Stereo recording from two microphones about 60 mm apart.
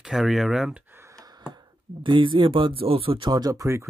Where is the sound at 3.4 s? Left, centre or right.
Right.